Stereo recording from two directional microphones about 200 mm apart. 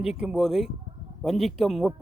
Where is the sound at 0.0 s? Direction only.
5° right (ahead or behind).